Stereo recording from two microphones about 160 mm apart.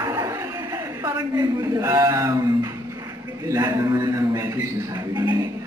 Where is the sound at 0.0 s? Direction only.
25° right (ahead or behind).